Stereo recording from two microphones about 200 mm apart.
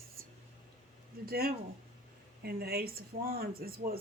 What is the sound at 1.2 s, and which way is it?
Speech, 50° right (ahead or behind).